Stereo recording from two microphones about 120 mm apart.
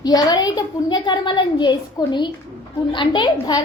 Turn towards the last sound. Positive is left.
turn(degrees=35)  # may be behind; listen again after turning